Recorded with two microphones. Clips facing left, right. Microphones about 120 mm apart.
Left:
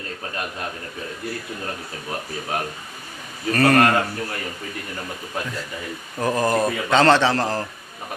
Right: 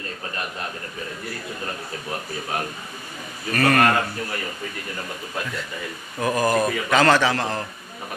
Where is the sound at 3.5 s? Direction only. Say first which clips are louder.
Left 3 dB; 30° left (ahead or behind).